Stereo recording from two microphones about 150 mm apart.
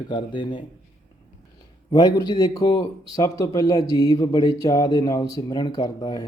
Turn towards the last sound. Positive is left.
turn(degrees=25)  # may be behind; listen again after turning